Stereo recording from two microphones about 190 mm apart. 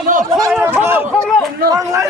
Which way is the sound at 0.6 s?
10° right (ahead or behind).